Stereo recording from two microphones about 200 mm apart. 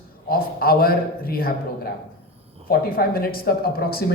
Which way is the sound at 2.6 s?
45° left (ahead or behind).